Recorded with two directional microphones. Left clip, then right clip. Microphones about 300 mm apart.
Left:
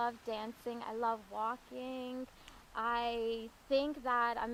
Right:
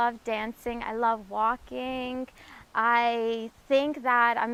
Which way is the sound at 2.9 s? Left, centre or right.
Right.